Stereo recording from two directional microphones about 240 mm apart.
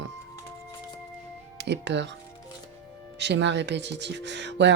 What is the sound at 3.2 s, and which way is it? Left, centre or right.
Speech, right.